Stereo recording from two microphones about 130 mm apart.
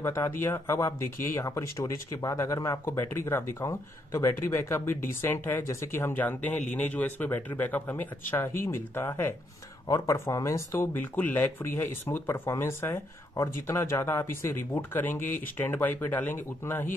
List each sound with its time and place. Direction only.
0.0 s speech: 20° left (ahead or behind)